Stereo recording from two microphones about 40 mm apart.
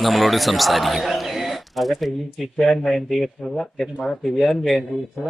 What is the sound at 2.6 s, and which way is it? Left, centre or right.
Speech, centre.